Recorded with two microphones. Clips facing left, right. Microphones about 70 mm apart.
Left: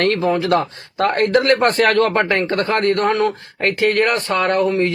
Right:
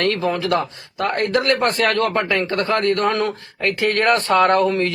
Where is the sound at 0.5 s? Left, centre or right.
Left.